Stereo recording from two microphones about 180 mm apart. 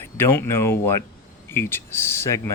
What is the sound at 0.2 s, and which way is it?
Speech, 15° left (ahead or behind).